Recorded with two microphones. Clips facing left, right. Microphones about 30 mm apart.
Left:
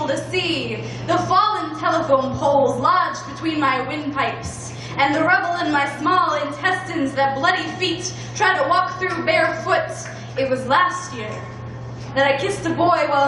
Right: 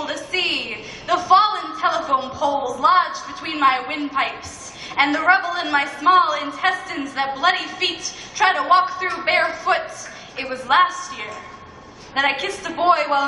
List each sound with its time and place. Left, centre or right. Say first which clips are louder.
0.0 s a woman's voice: left 1 dB; centre